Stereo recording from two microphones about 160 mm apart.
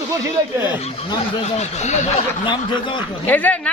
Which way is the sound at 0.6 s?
25° left (ahead or behind).